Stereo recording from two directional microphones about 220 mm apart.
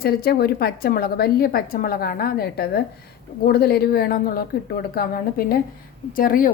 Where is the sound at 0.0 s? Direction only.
45° left (ahead or behind).